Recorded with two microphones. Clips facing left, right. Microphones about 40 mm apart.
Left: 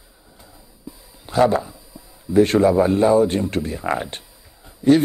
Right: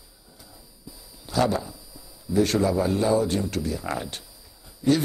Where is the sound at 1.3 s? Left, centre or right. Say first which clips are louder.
Left 7 dB; left.